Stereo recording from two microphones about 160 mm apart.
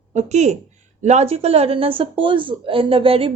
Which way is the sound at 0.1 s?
45° right (ahead or behind).